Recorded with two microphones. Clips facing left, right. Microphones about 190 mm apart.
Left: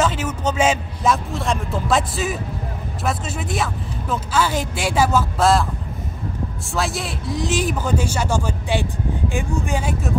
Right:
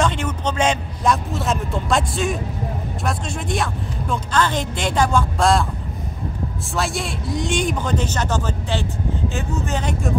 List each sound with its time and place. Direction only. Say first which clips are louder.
0.0 s a man's voice: left 1 dB; 5° left (ahead or behind)
6.7 s speech: even; centre (ahead or behind)